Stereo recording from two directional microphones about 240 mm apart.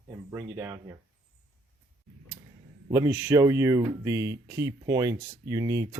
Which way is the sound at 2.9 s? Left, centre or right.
Centre.